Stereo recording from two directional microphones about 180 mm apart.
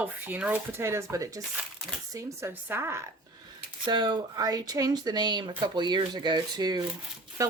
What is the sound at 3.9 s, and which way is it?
Speech, 25° right (ahead or behind).